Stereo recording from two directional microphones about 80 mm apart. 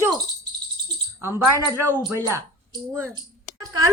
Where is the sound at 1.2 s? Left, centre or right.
Right.